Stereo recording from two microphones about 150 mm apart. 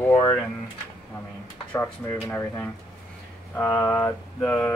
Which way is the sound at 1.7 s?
15° left (ahead or behind).